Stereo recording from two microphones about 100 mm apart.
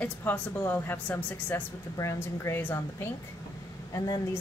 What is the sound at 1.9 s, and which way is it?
Speech, 30° left (ahead or behind).